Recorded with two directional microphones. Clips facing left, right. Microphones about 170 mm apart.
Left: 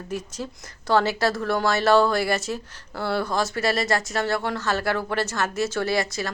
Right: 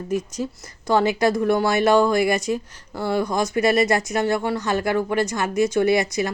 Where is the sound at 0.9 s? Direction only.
10° right (ahead or behind).